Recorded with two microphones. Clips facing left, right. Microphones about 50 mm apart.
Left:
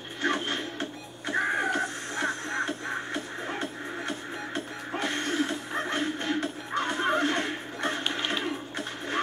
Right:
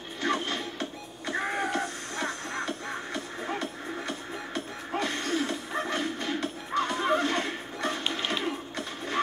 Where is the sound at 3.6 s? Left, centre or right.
Left.